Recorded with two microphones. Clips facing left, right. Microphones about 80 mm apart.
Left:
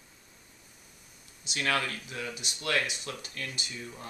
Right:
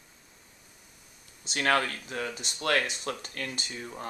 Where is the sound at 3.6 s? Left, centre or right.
Right.